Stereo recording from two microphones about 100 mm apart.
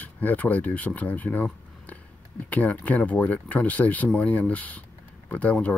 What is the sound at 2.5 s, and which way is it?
Speech, 15° left (ahead or behind).